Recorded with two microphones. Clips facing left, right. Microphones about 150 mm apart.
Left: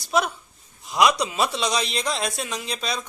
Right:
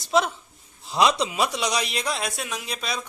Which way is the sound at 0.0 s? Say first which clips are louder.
Right 1 dB; 25° right (ahead or behind).